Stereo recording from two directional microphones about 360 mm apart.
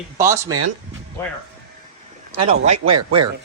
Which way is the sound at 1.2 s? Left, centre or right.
Centre.